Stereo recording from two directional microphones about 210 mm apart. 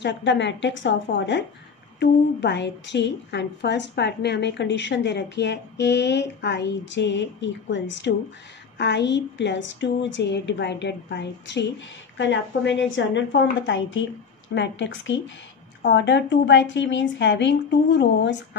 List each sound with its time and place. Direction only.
0.0 s a woman's voice: 60° left (ahead or behind)